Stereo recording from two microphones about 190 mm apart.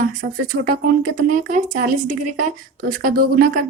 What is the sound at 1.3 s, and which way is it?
Speech, 40° right (ahead or behind).